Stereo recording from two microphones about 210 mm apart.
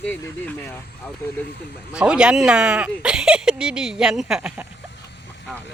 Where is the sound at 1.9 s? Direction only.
5° right (ahead or behind).